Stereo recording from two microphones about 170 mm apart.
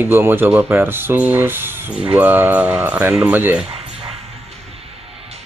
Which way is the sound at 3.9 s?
35° right (ahead or behind).